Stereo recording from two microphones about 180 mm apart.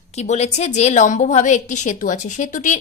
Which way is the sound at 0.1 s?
40° left (ahead or behind).